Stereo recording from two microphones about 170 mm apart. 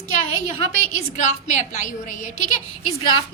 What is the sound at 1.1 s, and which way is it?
A woman's voice, 45° left (ahead or behind).